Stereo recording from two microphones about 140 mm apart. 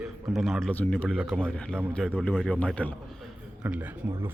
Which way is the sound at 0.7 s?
10° left (ahead or behind).